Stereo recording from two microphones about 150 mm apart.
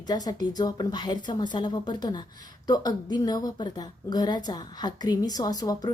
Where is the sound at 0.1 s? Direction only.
25° left (ahead or behind).